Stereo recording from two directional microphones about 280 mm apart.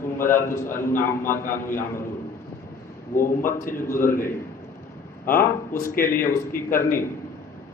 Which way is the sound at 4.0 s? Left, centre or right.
Left.